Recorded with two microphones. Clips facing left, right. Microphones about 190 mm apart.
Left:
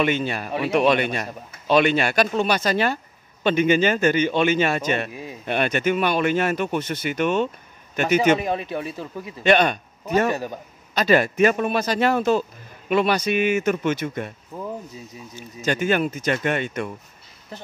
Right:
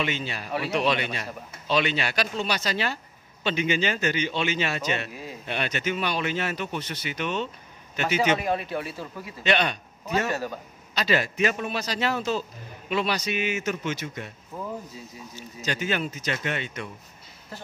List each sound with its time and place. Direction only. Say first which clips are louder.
0.0 s speech: left 8 dB; 55° left (ahead or behind)
8.4 s a man's voice: left 2 dB; 20° left (ahead or behind)
9.4 s a man's voice: left 7 dB; 50° left (ahead or behind)
10.3 s a man's voice: left 2 dB; 15° left (ahead or behind)
11.0 s speech: left 7 dB; 50° left (ahead or behind)
14.5 s a man's voice: left 1 dB; 15° left (ahead or behind)
15.3 s speech: left 7 dB; 50° left (ahead or behind)
17.5 s speech: left 3 dB; 20° left (ahead or behind)